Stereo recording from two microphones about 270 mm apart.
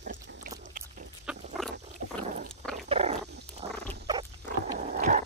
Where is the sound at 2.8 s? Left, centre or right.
Right.